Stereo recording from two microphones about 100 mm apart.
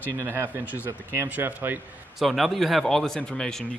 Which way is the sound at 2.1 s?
Centre (ahead or behind).